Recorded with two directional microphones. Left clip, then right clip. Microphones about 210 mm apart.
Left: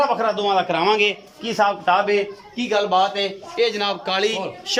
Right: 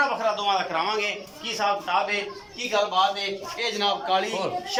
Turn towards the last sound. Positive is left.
turn(degrees=50)  # may be behind; listen again after turning